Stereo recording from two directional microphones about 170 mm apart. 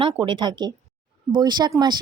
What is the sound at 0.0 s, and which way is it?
Speech, 30° right (ahead or behind).